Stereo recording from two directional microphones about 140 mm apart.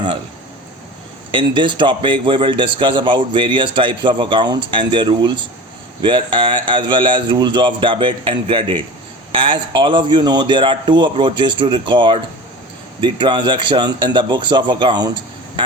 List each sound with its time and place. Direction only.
1.3 s a man's voice: 35° right (ahead or behind)